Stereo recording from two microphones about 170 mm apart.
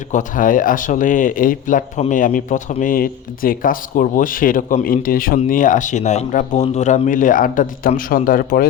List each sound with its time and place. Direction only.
0.1 s speech: 50° left (ahead or behind)